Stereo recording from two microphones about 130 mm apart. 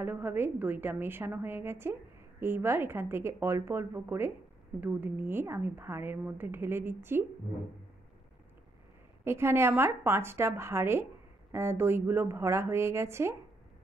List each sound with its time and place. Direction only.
0.0 s a woman's voice: 15° right (ahead or behind)
9.2 s a woman's voice: 20° right (ahead or behind)